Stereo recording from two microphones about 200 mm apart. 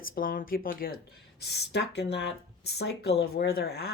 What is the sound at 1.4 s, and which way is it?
Speech, 55° left (ahead or behind).